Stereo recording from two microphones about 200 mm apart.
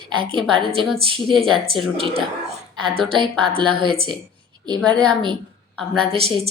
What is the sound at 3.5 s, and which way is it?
Speech, 25° right (ahead or behind).